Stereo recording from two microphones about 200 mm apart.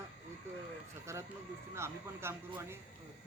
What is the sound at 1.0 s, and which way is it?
A man's voice, 15° right (ahead or behind).